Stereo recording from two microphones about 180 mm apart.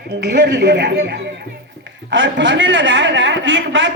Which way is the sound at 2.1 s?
90° right.